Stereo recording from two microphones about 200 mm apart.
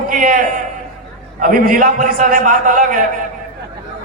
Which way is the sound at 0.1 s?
40° right (ahead or behind).